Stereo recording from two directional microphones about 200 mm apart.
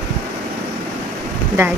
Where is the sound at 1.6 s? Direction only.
15° right (ahead or behind).